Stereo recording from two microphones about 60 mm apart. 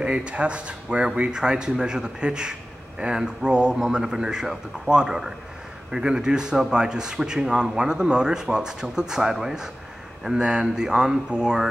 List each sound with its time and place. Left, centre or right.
0.0 s speech: centre